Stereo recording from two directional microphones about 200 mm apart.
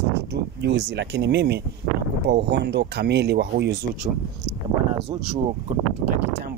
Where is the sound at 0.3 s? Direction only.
55° right (ahead or behind).